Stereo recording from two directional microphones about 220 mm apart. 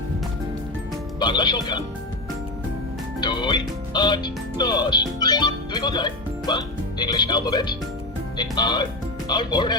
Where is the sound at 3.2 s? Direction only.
20° left (ahead or behind).